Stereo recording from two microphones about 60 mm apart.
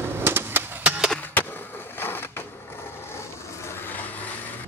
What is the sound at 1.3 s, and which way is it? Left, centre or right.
Skateboard, left.